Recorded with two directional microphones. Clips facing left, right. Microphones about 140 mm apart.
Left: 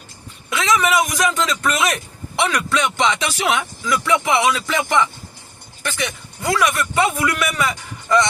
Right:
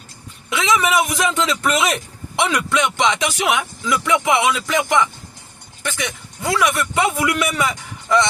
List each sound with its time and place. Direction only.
0.5 s a man's voice: 20° right (ahead or behind)